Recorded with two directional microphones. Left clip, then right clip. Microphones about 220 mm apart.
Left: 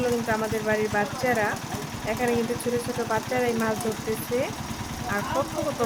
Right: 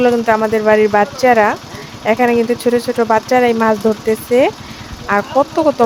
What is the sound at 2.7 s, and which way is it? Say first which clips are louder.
Speech: right 14 dB; 35° right (ahead or behind).